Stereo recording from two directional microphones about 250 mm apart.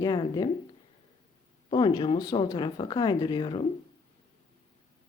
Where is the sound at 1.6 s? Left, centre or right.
Centre.